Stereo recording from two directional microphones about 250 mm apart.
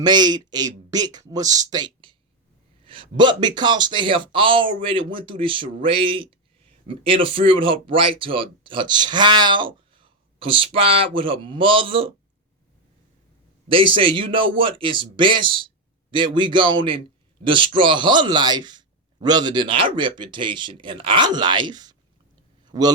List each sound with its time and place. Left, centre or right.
0.0 s a man's voice: centre
13.7 s speech: right
22.6 s a sound: centre